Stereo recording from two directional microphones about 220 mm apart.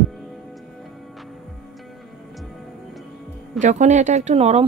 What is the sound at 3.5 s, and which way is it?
Speech, 35° right (ahead or behind).